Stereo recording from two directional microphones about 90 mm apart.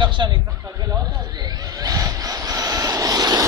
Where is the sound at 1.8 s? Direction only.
40° right (ahead or behind).